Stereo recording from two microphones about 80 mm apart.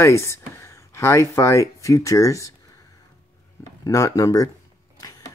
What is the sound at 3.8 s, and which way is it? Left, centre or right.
Speech, left.